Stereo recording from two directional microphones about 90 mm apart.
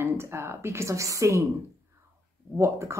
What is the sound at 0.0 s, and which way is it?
Speech, 30° right (ahead or behind).